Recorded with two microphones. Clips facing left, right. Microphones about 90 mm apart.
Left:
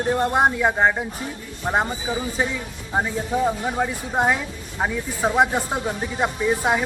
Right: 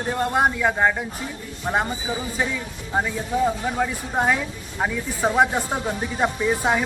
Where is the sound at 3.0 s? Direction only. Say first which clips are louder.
Even; 20° left (ahead or behind).